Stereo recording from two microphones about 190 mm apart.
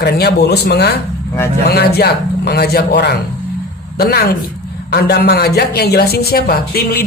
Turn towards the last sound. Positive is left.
turn(degrees=55)  # may be behind; listen again after turning